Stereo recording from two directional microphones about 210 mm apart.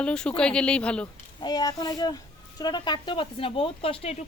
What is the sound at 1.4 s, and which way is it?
A woman's voice, 20° left (ahead or behind).